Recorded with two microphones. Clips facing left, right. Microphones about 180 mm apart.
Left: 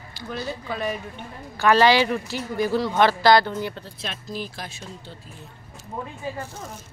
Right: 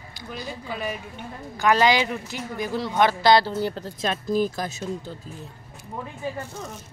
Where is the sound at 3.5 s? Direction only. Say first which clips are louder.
Right 3 dB; 35° right (ahead or behind).